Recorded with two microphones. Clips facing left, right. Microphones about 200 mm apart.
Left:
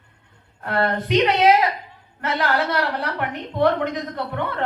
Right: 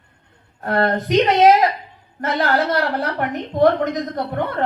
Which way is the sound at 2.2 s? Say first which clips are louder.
Right 3 dB; 35° right (ahead or behind).